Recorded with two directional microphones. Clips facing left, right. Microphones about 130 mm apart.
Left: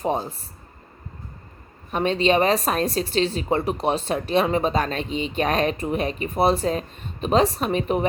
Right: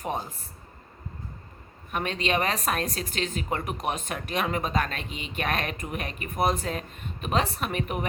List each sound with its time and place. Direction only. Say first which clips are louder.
0.0 s speech: left 7 dB; 30° left (ahead or behind)
1.9 s speech: left 8 dB; 30° left (ahead or behind)